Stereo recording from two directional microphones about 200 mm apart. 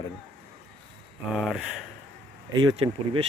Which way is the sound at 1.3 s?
Centre (ahead or behind).